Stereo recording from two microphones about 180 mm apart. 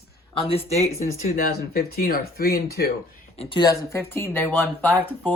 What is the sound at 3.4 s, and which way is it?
Speech, 25° left (ahead or behind).